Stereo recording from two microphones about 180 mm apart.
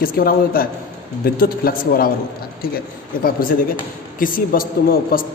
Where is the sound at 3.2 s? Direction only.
55° left (ahead or behind).